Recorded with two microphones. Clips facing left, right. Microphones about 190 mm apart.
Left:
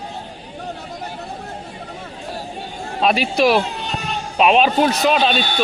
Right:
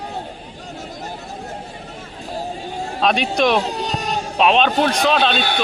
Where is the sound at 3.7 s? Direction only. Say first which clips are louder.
Right 3 dB; 40° right (ahead or behind).